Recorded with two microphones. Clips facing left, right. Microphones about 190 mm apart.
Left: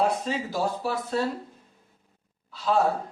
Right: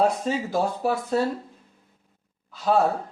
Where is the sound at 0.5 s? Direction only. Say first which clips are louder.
Right 4 dB; 55° right (ahead or behind).